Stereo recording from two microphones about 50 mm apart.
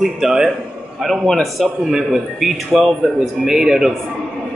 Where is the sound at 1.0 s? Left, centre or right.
Centre.